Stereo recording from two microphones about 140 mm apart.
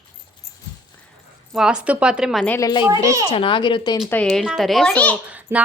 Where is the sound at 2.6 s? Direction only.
30° left (ahead or behind).